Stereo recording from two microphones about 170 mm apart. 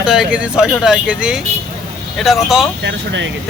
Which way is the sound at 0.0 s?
5° right (ahead or behind).